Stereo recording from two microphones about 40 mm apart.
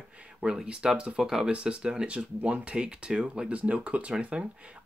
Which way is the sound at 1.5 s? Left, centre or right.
Right.